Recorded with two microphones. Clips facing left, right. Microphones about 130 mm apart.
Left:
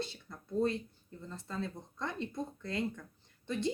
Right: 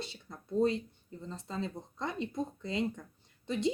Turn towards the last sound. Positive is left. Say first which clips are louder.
# right 3 dB
turn(degrees=-20)  # may be behind; listen again after turning